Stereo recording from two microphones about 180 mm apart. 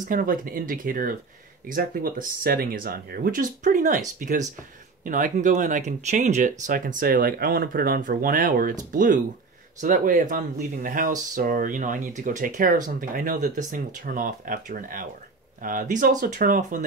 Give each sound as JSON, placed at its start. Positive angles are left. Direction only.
{"t": 0.0, "sound": "speech", "side_deg": -50}